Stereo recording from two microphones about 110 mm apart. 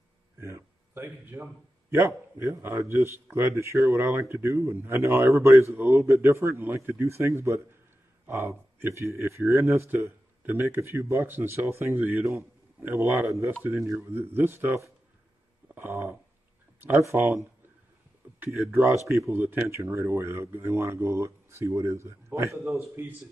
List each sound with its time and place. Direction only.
0.4 s a man's voice: 25° right (ahead or behind)